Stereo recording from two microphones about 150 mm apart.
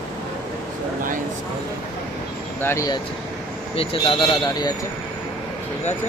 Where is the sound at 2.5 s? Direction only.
15° left (ahead or behind).